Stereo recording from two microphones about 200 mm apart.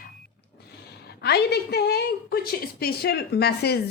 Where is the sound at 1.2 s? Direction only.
55° left (ahead or behind).